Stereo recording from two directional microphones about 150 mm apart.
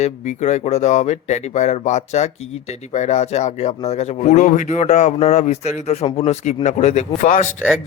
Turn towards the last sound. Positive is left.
turn(degrees=55)  # may be behind; listen again after turning